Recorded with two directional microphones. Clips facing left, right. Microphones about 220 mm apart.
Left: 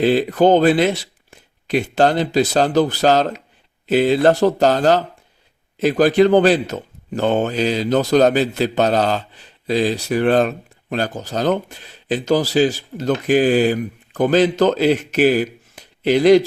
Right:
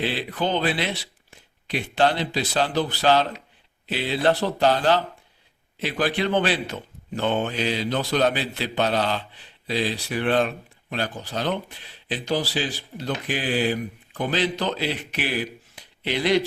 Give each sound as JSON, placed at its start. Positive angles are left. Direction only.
{"t": 0.0, "sound": "a man's voice", "side_deg": 45}